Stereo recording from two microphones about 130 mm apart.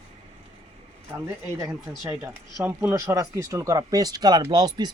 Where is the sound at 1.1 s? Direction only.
20° right (ahead or behind).